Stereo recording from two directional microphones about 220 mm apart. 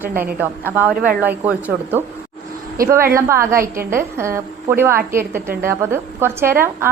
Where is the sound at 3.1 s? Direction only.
10° right (ahead or behind).